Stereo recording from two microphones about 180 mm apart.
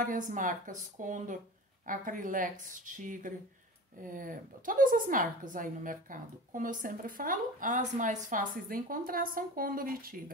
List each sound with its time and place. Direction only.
0.0 s a woman's voice: 45° right (ahead or behind)